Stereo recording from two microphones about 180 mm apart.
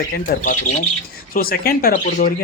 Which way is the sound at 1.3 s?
55° left (ahead or behind).